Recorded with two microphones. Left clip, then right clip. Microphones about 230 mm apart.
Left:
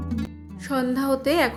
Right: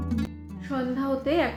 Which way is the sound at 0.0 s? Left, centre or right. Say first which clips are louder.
Even; centre.